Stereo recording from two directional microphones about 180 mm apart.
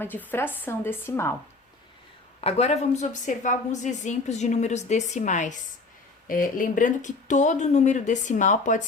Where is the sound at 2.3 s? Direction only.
35° left (ahead or behind).